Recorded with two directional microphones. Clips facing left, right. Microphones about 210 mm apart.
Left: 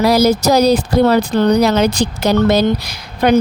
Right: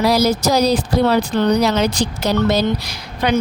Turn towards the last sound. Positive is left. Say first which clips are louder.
# left 6 dB
turn(degrees=60)  # may be behind; listen again after turning